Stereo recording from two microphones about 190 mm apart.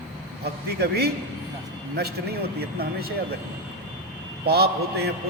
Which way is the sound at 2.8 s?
55° right (ahead or behind).